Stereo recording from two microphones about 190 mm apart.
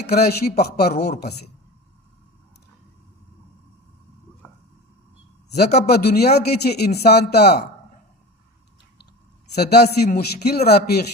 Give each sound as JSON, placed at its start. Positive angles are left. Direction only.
{"t": 0.0, "sound": "a man's voice", "side_deg": 55}
{"t": 5.5, "sound": "a man's voice", "side_deg": 60}
{"t": 9.6, "sound": "a man's voice", "side_deg": 55}